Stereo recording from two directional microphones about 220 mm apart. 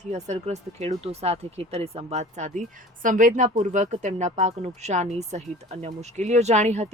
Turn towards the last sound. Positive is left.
turn(degrees=-30)  # may be behind; listen again after turning